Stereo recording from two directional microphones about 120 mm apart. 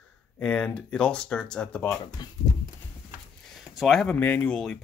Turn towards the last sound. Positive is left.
turn(degrees=15)  # may be behind; listen again after turning